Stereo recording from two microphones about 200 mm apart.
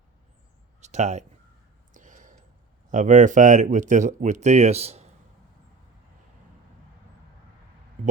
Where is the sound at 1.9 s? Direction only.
40° right (ahead or behind).